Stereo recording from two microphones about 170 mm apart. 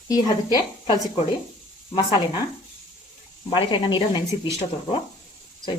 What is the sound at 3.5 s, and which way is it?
A woman's voice, 30° left (ahead or behind).